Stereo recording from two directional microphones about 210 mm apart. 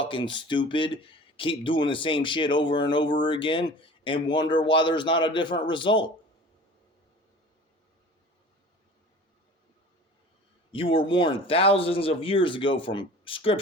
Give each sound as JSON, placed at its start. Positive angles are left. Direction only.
{"t": 0.0, "sound": "speech", "side_deg": 25}
{"t": 10.7, "sound": "speech", "side_deg": 25}